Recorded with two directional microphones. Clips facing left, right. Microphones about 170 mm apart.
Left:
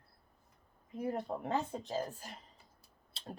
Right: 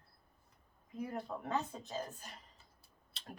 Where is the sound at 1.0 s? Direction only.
30° left (ahead or behind).